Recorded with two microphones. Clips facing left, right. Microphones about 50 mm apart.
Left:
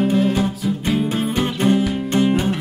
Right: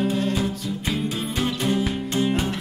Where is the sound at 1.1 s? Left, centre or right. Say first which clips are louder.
Left 5 dB; left.